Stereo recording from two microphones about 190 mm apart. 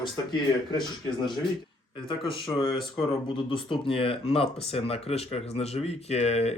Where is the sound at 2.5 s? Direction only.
25° left (ahead or behind).